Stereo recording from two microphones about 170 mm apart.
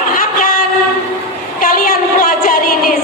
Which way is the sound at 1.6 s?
55° left (ahead or behind).